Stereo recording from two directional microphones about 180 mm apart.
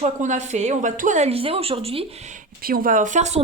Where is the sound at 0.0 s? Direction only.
40° right (ahead or behind).